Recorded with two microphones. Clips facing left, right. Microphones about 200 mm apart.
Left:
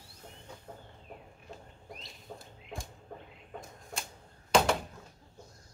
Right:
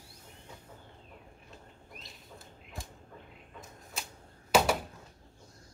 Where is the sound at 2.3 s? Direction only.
50° left (ahead or behind).